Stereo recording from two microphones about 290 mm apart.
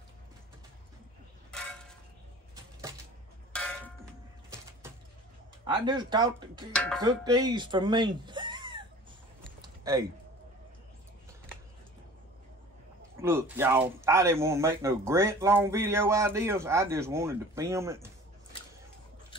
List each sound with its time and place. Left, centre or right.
1.5 s a sound: centre
3.5 s music: centre
5.7 s speech: centre
6.7 s speech: centre
7.0 s speech: centre
13.2 s speech: centre